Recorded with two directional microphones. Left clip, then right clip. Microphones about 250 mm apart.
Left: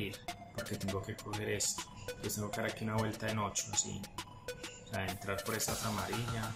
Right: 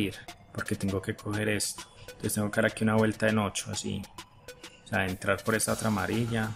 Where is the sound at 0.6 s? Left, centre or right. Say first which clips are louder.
Right 8 dB; centre.